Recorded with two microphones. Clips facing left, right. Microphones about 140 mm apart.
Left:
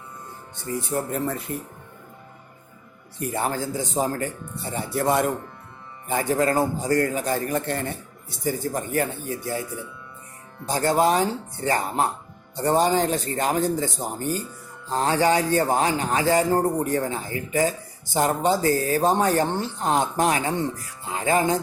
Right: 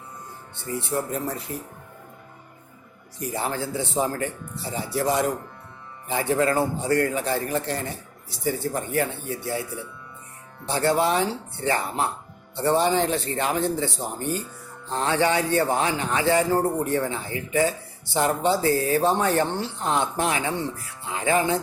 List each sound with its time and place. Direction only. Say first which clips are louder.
0.5 s a man's voice: left 1 dB; 45° left (ahead or behind)
3.2 s a man's voice: left 2 dB; 55° left (ahead or behind)
4.9 s speech: left 1 dB; 55° left (ahead or behind)
6.1 s a man's voice: even; 45° left (ahead or behind)
10.7 s a man's voice: left 1 dB; 40° left (ahead or behind)